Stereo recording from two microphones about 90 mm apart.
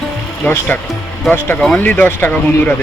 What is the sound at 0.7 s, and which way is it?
Speech, 20° left (ahead or behind).